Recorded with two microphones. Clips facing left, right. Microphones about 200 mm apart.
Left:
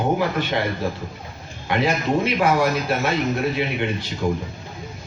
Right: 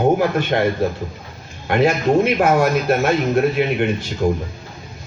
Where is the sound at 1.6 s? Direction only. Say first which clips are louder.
Right 5 dB; 50° right (ahead or behind).